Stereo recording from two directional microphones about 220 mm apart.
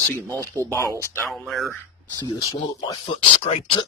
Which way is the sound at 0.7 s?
15° left (ahead or behind).